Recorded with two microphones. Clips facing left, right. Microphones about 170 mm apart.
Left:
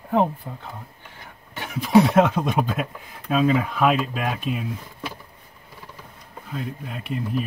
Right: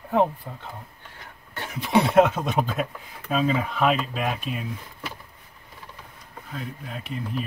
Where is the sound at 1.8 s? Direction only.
Centre (ahead or behind).